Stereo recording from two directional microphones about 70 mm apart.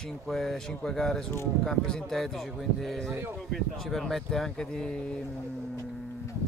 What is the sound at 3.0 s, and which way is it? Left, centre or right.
Speech, right.